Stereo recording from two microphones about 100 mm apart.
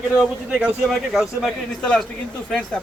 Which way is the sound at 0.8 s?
Centre (ahead or behind).